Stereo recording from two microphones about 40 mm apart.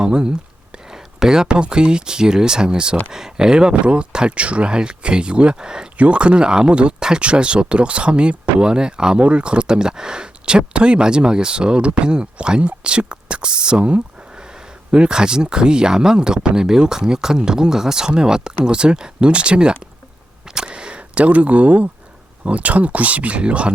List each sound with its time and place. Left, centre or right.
0.0 s speech: right
6.0 s speech: right
20.5 s a sound: right
22.4 s speech: right